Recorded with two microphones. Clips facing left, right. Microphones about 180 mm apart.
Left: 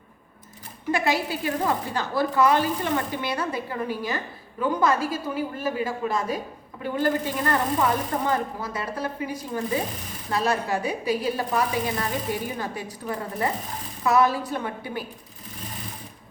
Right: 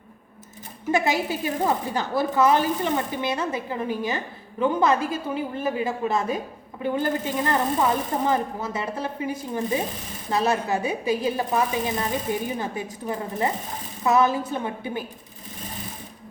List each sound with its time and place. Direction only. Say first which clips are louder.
0.9 s speech: right 2 dB; 20° right (ahead or behind)